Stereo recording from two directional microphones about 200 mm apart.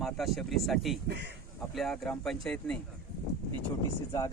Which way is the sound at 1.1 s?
55° right (ahead or behind).